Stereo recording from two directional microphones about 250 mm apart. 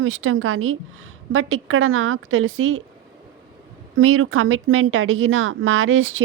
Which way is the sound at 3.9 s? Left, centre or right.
Right.